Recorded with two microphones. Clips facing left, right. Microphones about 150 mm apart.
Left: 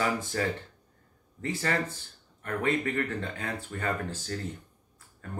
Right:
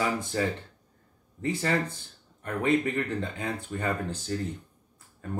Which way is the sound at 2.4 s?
15° right (ahead or behind).